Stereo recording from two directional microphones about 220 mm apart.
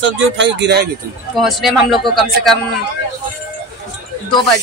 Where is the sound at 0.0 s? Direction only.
55° right (ahead or behind).